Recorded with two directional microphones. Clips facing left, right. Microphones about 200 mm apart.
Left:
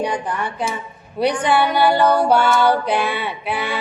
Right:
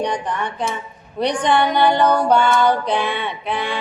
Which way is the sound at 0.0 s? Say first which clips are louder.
Even; 5° left (ahead or behind).